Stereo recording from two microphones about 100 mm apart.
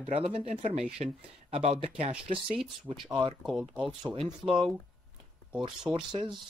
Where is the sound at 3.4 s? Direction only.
5° right (ahead or behind).